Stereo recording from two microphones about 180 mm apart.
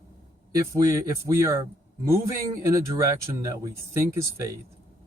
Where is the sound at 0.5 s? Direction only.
20° right (ahead or behind).